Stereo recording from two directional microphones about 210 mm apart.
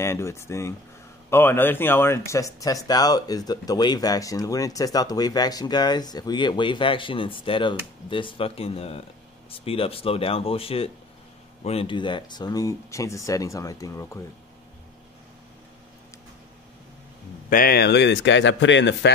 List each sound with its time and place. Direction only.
0.0 s speech: 10° left (ahead or behind)
17.5 s a man's voice: 45° left (ahead or behind)